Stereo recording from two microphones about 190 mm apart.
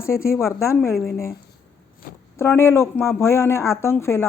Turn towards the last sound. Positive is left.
turn(degrees=15)  # may be behind; listen again after turning